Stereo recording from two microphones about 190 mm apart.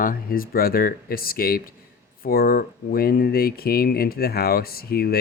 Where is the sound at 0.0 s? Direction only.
50° left (ahead or behind).